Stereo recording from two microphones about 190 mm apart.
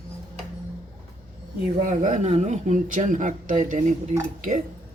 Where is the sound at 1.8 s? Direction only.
45° right (ahead or behind).